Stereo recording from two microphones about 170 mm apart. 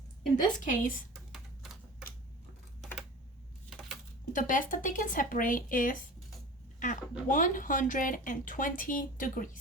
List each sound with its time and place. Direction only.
0.6 s speech: 50° left (ahead or behind)
4.3 s speech: 50° left (ahead or behind)